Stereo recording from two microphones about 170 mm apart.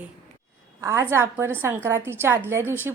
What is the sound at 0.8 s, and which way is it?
A woman's voice, 15° right (ahead or behind).